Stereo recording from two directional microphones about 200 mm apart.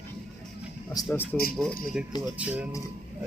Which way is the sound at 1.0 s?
20° left (ahead or behind).